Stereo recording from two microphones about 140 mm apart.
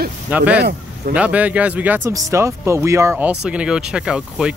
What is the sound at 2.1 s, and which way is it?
Speech, 20° right (ahead or behind).